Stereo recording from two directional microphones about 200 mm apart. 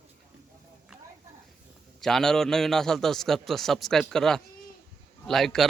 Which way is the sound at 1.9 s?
Centre (ahead or behind).